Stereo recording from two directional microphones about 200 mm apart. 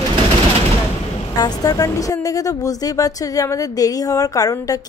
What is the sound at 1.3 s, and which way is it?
Speech, 20° left (ahead or behind).